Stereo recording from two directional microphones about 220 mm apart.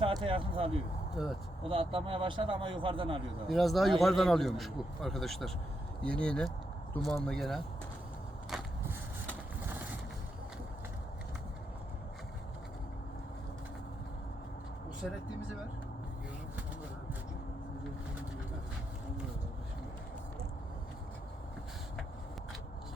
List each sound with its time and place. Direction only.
0.2 s speech: 25° right (ahead or behind)
1.2 s a man's voice: centre (ahead or behind)
1.6 s speech: 25° right (ahead or behind)
3.5 s a man's voice: centre (ahead or behind)
15.0 s a man's voice: centre (ahead or behind)